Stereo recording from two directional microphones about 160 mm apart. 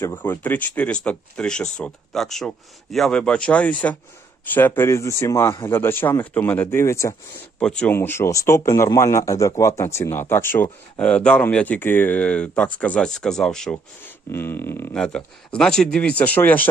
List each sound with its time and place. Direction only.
0.0 s speech: 15° left (ahead or behind)
7.6 s speech: 5° left (ahead or behind)
14.3 s speech: 15° left (ahead or behind)